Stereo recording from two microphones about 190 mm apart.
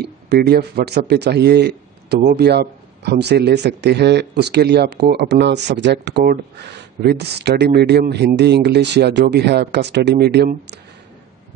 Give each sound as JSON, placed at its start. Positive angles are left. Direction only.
{"t": 0.0, "sound": "speech", "side_deg": -60}